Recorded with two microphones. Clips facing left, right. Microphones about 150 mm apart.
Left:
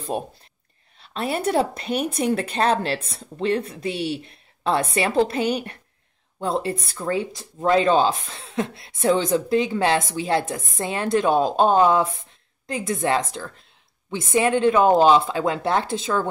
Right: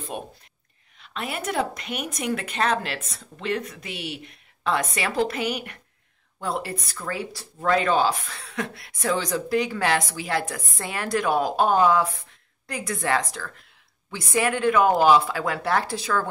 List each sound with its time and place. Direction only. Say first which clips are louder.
0.1 s a woman's voice: left 6 dB; 35° left (ahead or behind)